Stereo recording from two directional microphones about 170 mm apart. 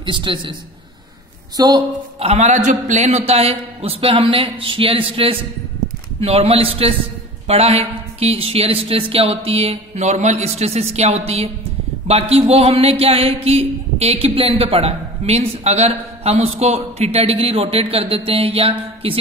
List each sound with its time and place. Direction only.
0.0 s a woman's voice: 30° right (ahead or behind)
1.6 s a woman's voice: 25° right (ahead or behind)
2.1 s a man's voice: 40° right (ahead or behind)